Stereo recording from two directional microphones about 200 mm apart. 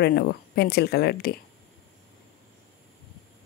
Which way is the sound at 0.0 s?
50° left (ahead or behind).